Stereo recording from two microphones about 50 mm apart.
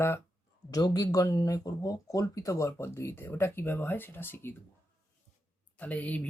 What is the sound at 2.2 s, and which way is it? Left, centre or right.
Speech, left.